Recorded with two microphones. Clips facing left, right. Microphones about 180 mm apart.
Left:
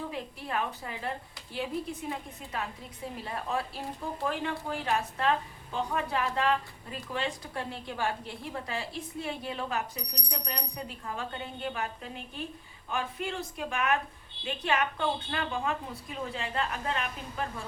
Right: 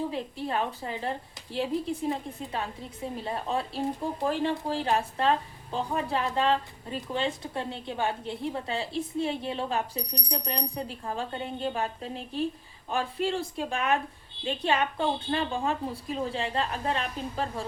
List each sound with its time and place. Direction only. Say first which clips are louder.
0.1 s a woman's voice: right 4 dB; 30° right (ahead or behind)